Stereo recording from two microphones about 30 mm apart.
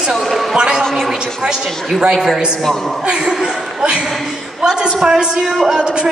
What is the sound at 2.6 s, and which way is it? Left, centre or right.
Speech, centre.